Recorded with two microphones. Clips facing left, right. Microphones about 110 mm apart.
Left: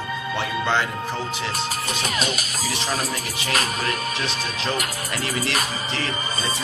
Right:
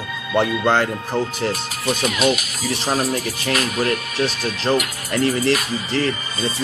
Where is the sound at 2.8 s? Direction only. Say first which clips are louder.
Right 7 dB; 45° right (ahead or behind).